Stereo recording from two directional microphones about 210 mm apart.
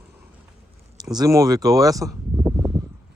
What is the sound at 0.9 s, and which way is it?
Speech, 20° right (ahead or behind).